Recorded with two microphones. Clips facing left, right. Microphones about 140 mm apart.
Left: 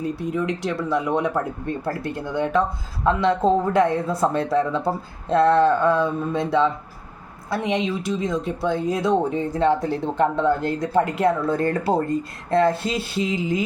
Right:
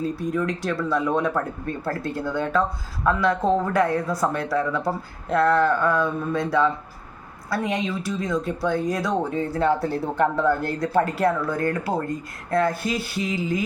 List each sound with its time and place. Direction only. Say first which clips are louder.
0.0 s speech: even; 20° left (ahead or behind)